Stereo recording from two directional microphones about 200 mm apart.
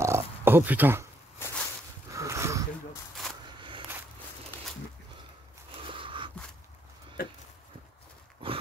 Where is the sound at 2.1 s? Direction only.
15° right (ahead or behind).